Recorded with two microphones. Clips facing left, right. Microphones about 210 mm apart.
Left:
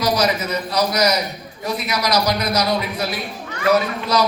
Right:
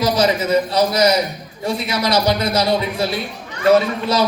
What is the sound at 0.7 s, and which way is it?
A man's voice, 25° right (ahead or behind).